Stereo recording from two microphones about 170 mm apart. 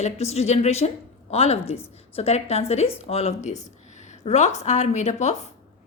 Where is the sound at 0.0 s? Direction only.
40° left (ahead or behind).